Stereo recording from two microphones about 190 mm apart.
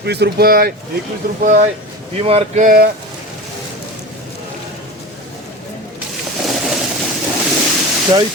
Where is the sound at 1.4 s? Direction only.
40° right (ahead or behind).